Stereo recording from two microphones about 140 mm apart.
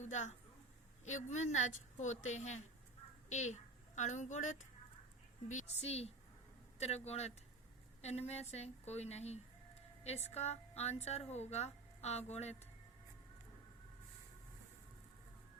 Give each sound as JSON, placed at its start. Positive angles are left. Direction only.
{"t": 0.0, "sound": "a woman's voice", "side_deg": 55}